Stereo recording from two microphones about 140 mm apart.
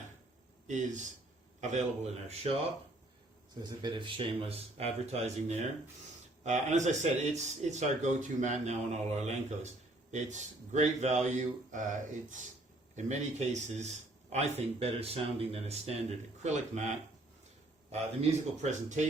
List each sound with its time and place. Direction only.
0.7 s speech: 60° right (ahead or behind)
3.6 s speech: 35° right (ahead or behind); by 17.0 s 60° right (ahead or behind)
18.6 s speech: 55° right (ahead or behind)